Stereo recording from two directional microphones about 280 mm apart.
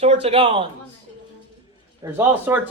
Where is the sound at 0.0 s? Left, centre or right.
Right.